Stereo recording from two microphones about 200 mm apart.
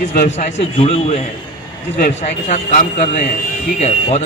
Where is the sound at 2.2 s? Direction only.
35° left (ahead or behind).